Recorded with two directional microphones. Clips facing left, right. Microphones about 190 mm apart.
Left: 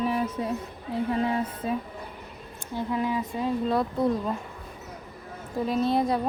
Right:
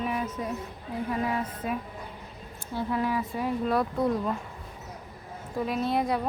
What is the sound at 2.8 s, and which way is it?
Speech, 20° left (ahead or behind).